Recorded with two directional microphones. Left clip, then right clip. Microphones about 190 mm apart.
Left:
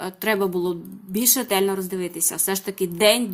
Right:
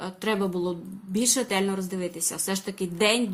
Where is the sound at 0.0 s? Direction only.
30° left (ahead or behind).